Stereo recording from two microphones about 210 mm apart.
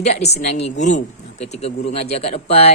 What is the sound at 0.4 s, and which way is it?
A woman's voice, 30° left (ahead or behind).